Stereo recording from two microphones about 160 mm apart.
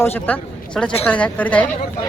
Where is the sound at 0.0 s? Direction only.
10° left (ahead or behind).